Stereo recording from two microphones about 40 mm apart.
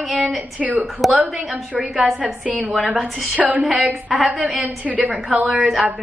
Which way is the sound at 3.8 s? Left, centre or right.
Right.